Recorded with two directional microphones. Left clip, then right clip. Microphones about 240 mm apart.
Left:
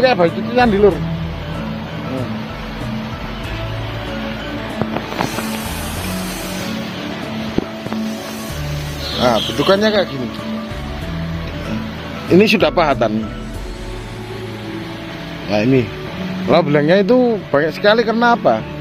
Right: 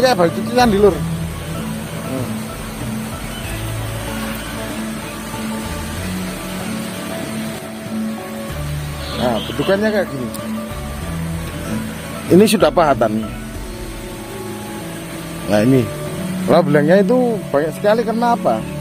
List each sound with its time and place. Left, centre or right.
0.0 s speech: centre
9.3 s speech: centre
12.3 s speech: right
15.5 s speech: right
16.4 s speech: centre